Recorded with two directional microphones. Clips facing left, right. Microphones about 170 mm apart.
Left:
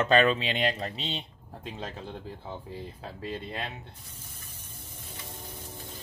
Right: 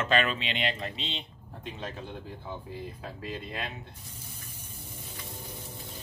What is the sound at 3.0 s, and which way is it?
Speech, 30° left (ahead or behind).